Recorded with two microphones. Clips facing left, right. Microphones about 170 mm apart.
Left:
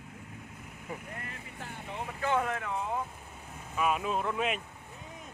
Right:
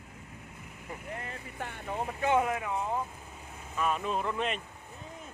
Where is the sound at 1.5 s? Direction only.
60° right (ahead or behind).